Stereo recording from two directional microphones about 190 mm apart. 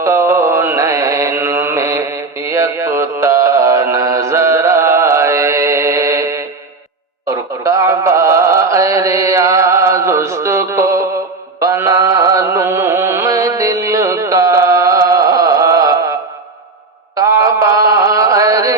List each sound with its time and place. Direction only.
0.0 s mantra: 15° right (ahead or behind)
7.3 s music: 15° right (ahead or behind)
11.6 s carnatic music: 15° right (ahead or behind)
17.2 s chant: 15° right (ahead or behind)